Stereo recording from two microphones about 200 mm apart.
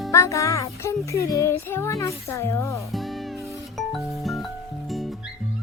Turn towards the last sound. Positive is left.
turn(degrees=0)  # may be behind; listen again after turning